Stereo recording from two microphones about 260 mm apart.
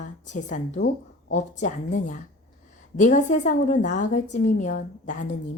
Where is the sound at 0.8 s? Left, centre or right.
Left.